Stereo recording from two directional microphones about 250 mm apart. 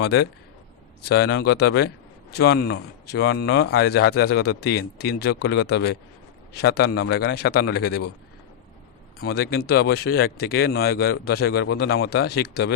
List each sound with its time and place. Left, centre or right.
0.0 s speech: left
9.1 s speech: left